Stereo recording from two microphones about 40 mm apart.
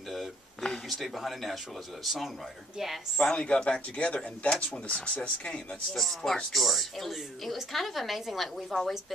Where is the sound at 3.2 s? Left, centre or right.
Left.